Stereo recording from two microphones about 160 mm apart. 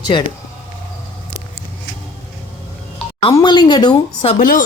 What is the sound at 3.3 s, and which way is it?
Speech, 25° left (ahead or behind).